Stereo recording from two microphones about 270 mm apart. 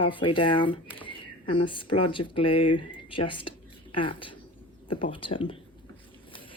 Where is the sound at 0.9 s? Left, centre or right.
Centre.